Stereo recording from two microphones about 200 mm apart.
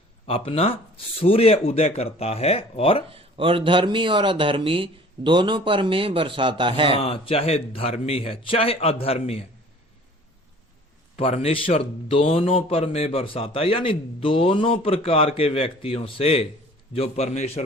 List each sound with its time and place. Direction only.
0.3 s speech: 30° left (ahead or behind)
3.1 s speech: 25° right (ahead or behind)
7.0 s speech: 30° left (ahead or behind)
11.2 s a man's voice: 30° left (ahead or behind)